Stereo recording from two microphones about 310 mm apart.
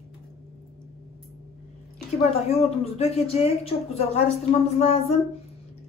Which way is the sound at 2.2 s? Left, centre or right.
Centre.